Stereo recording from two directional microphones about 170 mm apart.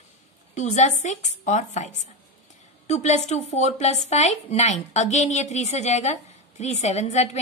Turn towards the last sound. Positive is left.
turn(degrees=40)  # may be behind; listen again after turning